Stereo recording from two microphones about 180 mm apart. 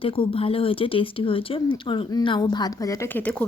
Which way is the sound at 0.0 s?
30° left (ahead or behind).